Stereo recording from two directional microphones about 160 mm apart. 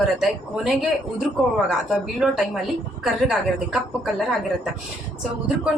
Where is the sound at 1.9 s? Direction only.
5° right (ahead or behind).